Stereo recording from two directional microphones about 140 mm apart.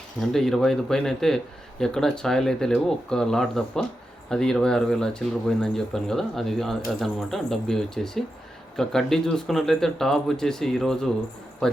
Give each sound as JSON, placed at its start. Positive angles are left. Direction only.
{"t": 0.2, "sound": "speech", "side_deg": 0}